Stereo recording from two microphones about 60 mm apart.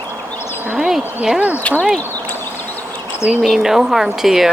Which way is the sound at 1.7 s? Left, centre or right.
Left.